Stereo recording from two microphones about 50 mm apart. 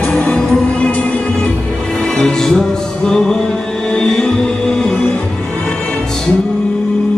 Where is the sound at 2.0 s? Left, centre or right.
Centre.